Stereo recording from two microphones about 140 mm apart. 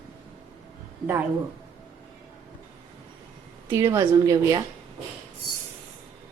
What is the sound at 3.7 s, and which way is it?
Speech, 20° right (ahead or behind).